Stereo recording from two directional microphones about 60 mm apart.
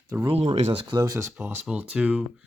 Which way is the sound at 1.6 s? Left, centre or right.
Centre.